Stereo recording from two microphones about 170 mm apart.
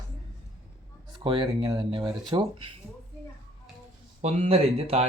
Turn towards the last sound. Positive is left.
turn(degrees=-35)  # may be behind; listen again after turning